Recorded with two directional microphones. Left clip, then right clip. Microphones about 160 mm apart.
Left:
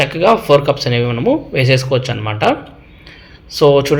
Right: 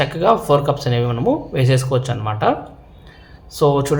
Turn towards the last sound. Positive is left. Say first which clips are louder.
# left 6 dB
turn(degrees=5)  # may be behind; listen again after turning